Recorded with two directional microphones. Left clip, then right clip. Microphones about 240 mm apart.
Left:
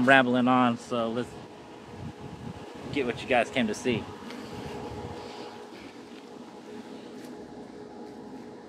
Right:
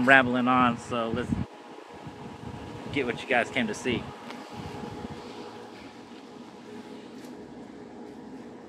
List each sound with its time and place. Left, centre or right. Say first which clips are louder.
0.0 s speech: right 1 dB; centre
3.0 s speech: even; centre